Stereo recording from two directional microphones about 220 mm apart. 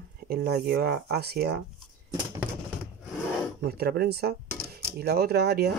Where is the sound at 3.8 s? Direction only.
45° right (ahead or behind).